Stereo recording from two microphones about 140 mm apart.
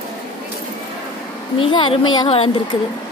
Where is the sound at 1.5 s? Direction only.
40° left (ahead or behind).